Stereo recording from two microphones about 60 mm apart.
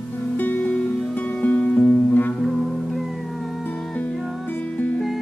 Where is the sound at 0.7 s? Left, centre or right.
Centre; by 2.3 s left.